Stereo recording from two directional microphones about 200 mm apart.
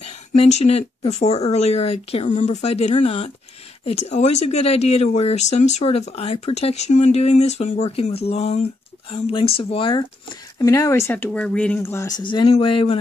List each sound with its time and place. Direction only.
0.0 s speech: 35° left (ahead or behind)